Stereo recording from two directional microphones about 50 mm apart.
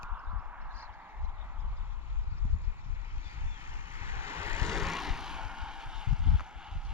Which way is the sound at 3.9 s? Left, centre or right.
Right.